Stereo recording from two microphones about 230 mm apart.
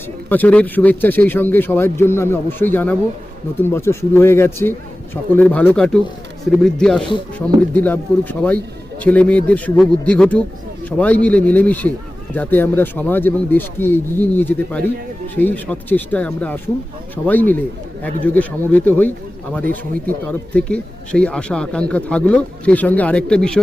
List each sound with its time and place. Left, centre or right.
0.3 s speech: centre
20.3 s speech: centre